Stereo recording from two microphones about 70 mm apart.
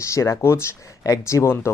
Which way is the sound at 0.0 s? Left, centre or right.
Left.